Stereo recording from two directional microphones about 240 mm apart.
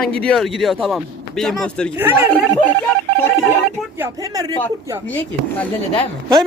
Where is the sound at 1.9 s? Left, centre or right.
Centre.